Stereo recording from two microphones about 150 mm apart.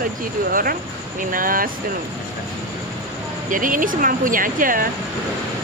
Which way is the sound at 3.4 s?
65° right (ahead or behind).